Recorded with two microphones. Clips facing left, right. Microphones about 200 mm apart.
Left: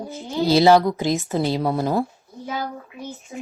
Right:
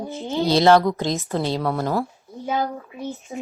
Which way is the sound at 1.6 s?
20° left (ahead or behind).